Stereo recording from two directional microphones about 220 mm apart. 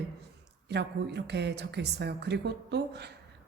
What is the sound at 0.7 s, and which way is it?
Speech, 50° right (ahead or behind).